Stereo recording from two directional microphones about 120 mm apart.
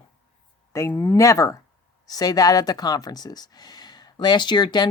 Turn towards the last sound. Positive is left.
turn(degrees=35)  # may be behind; listen again after turning